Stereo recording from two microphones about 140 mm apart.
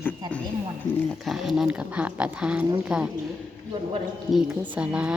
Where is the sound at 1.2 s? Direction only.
Centre (ahead or behind).